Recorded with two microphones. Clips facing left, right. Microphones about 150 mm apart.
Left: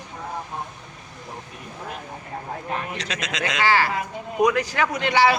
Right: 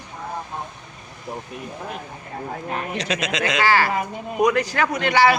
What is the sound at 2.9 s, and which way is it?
Speech, 5° right (ahead or behind).